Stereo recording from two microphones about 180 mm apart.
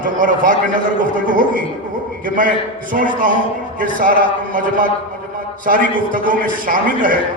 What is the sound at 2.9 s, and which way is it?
A man's voice, 45° right (ahead or behind).